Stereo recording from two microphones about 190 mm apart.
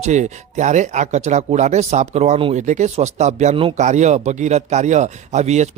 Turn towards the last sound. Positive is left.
turn(degrees=-35)  # may be behind; listen again after turning